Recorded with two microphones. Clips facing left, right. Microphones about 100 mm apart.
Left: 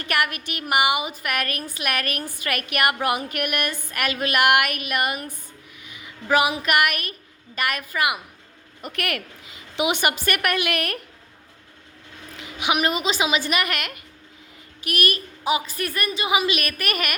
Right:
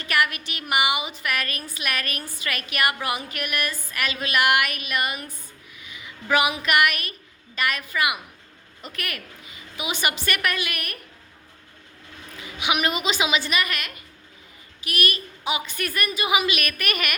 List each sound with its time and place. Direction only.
0.0 s a woman's voice: 55° left (ahead or behind)
6.2 s a woman's voice: 35° left (ahead or behind)
8.8 s a woman's voice: 65° left (ahead or behind); by 11.0 s 85° left
12.5 s a woman's voice: 45° left (ahead or behind)
13.5 s a woman's voice: 65° left (ahead or behind)
14.8 s a woman's voice: 50° left (ahead or behind)